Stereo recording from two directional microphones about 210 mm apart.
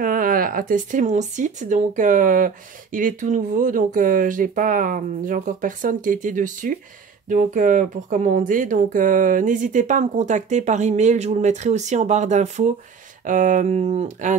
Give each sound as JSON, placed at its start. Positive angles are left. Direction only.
{"t": 0.0, "sound": "speech", "side_deg": -40}